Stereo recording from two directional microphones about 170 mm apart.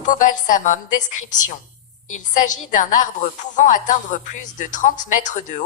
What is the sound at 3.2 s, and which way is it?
A woman's voice, 45° left (ahead or behind).